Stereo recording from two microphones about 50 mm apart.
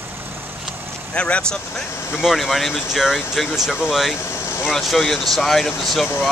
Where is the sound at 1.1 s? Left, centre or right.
Left.